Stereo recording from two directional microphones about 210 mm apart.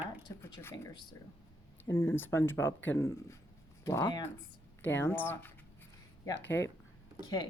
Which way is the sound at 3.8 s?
15° left (ahead or behind).